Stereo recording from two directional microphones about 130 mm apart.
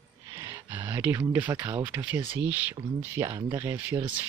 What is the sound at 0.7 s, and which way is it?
Speech, 15° right (ahead or behind).